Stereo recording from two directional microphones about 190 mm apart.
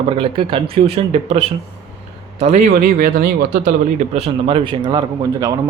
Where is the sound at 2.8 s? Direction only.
45° right (ahead or behind).